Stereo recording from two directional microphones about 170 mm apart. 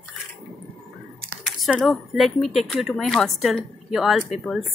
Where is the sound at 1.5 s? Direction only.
5° right (ahead or behind).